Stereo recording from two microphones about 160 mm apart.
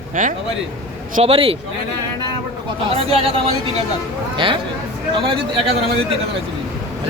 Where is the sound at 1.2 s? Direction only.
35° right (ahead or behind).